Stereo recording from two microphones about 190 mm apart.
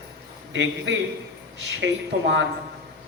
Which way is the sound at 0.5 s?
75° right (ahead or behind).